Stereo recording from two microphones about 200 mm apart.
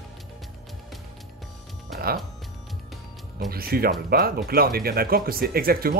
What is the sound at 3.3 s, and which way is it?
Speech, 50° right (ahead or behind).